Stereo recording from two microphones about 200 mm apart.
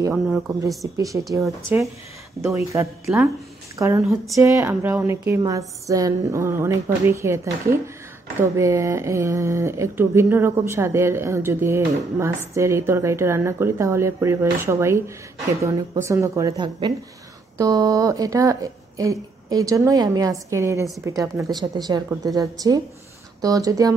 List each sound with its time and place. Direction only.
0.0 s speech: 5° right (ahead or behind)
2.4 s a woman's voice: 15° right (ahead or behind)